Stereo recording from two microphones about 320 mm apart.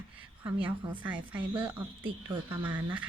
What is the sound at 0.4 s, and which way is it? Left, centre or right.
Speech, centre.